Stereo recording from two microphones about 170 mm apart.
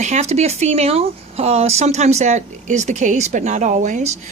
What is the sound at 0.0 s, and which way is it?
Speech, 40° right (ahead or behind).